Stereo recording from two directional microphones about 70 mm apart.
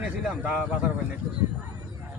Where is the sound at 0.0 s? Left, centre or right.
Centre.